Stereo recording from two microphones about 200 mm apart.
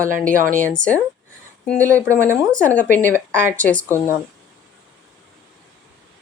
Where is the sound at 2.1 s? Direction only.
15° right (ahead or behind).